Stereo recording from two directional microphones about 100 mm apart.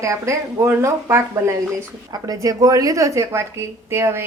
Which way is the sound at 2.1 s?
40° right (ahead or behind).